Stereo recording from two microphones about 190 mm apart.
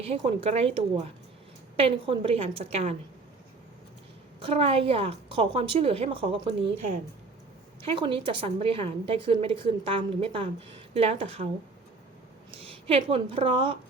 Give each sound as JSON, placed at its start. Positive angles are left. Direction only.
{"t": 0.0, "sound": "a woman's voice", "side_deg": -30}
{"t": 4.4, "sound": "a woman's voice", "side_deg": -30}
{"t": 7.8, "sound": "a woman's voice", "side_deg": -25}
{"t": 12.5, "sound": "a woman's voice", "side_deg": -30}